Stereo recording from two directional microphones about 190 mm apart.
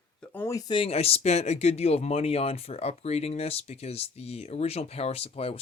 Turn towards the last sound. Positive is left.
turn(degrees=30)  # may be behind; listen again after turning